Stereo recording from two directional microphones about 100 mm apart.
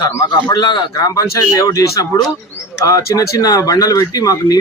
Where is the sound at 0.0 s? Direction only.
45° left (ahead or behind).